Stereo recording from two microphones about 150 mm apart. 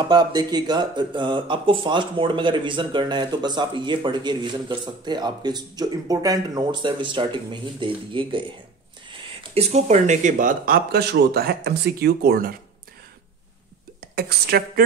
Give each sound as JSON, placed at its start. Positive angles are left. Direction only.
{"t": 0.0, "sound": "speech", "side_deg": -30}
{"t": 14.1, "sound": "a woman's voice", "side_deg": -90}